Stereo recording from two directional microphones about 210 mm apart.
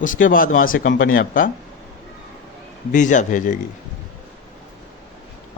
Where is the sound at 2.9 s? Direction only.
35° left (ahead or behind).